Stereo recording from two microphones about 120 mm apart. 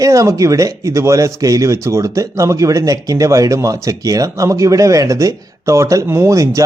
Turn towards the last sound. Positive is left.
turn(degrees=-25)  # may be behind; listen again after turning